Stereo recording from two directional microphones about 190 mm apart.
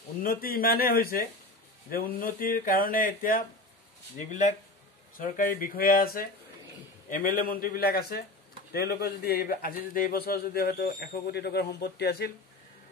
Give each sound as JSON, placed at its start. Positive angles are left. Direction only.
{"t": 0.2, "sound": "a man's voice", "side_deg": 50}